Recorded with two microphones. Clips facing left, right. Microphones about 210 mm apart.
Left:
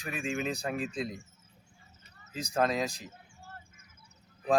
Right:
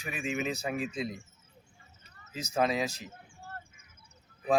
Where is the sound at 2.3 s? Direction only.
5° right (ahead or behind).